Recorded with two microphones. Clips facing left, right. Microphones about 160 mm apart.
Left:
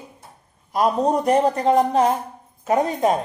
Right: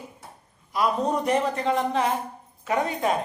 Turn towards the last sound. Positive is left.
turn(degrees=40)  # may be behind; listen again after turning